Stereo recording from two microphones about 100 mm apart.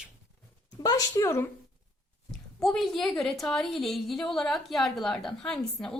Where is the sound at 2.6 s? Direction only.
Centre (ahead or behind).